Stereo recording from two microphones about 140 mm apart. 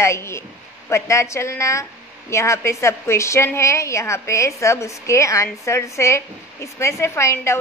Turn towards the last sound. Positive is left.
turn(degrees=20)  # may be behind; listen again after turning